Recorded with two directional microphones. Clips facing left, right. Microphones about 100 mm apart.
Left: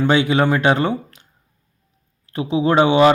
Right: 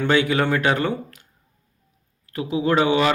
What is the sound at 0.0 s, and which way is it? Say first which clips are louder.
Speech: left 3 dB; 20° left (ahead or behind).